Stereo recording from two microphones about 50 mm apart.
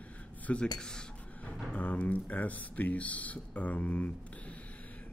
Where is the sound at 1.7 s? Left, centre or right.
Left.